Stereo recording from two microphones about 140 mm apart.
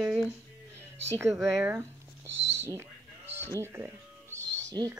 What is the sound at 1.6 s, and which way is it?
Speech, 15° right (ahead or behind).